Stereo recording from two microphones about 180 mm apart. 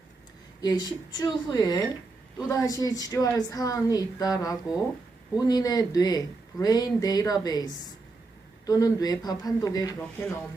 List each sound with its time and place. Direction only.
0.6 s speech: 20° left (ahead or behind)